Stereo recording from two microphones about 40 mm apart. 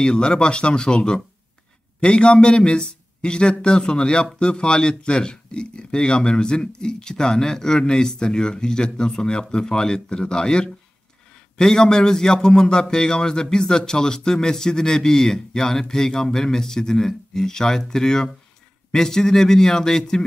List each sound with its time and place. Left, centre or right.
0.0 s speech: left